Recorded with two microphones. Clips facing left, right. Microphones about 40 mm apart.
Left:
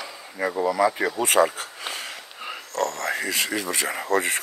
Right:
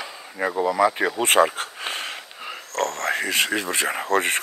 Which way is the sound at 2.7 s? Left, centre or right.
Right.